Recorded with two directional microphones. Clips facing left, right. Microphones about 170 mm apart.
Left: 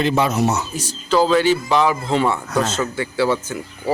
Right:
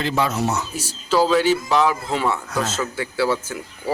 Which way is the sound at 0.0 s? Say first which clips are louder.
Left 4 dB; 20° left (ahead or behind).